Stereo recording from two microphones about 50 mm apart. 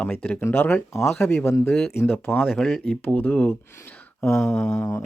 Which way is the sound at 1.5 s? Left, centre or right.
Left.